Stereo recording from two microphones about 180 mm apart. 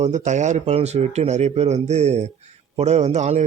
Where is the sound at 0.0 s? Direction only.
40° right (ahead or behind).